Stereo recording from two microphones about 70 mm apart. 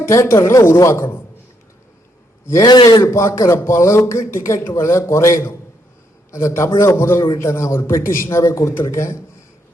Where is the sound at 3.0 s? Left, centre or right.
Left.